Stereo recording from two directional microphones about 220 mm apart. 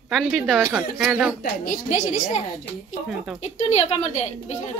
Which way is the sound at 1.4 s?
35° left (ahead or behind).